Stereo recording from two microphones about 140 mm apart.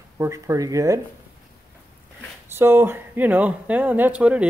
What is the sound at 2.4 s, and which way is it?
Speech, 15° right (ahead or behind).